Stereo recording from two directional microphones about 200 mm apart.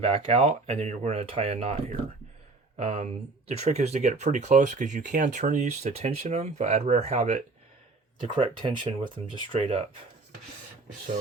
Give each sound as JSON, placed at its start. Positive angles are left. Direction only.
{"t": 0.3, "sound": "speech", "side_deg": -30}